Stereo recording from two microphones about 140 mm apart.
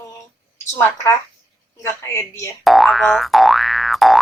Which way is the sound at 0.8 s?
20° left (ahead or behind).